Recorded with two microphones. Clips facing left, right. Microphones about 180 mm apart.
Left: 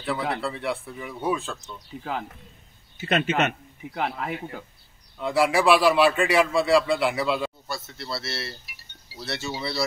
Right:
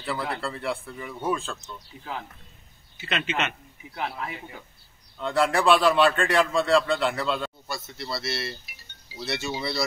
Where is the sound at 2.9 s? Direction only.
45° left (ahead or behind); by 4.6 s 60° left (ahead or behind).